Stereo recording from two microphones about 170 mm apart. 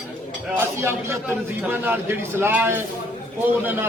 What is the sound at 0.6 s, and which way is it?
Speech, 15° right (ahead or behind).